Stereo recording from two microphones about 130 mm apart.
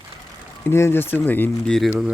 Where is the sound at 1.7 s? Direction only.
Centre (ahead or behind).